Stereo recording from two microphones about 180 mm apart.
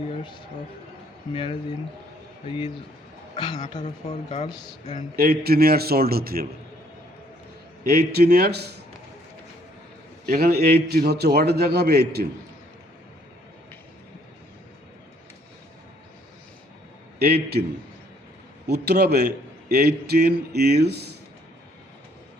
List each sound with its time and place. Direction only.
0.1 s a sound: 25° left (ahead or behind)
1.3 s a man's voice: 30° left (ahead or behind)
5.1 s a man's voice: 55° right (ahead or behind)
7.9 s a man's voice: 60° right (ahead or behind)
10.2 s a man's voice: 55° right (ahead or behind)
17.2 s a man's voice: 60° right (ahead or behind)
18.7 s a man's voice: 60° right (ahead or behind)